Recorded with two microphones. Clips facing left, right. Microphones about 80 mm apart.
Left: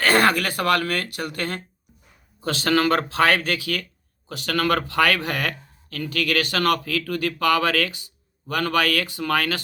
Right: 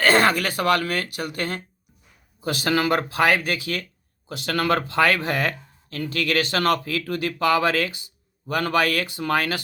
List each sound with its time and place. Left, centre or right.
0.0 s speech: right
2.4 s speech: centre